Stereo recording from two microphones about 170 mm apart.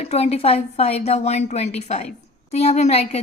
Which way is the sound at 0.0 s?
35° left (ahead or behind).